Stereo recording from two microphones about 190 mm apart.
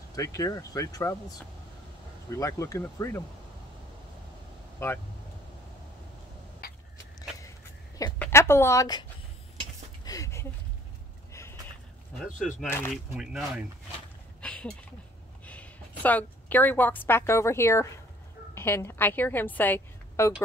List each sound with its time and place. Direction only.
0.1 s speech: 15° left (ahead or behind)
2.3 s speech: 15° left (ahead or behind)
4.7 s speech: 10° left (ahead or behind)
7.2 s vehicle: 15° left (ahead or behind)
8.2 s speech: 15° left (ahead or behind)
10.0 s a sound: 15° left (ahead or behind)
12.6 s speech: 10° left (ahead or behind)
12.9 s speech: centre (ahead or behind)
14.4 s a sound: 5° left (ahead or behind)
15.4 s a woman's voice: 5° left (ahead or behind)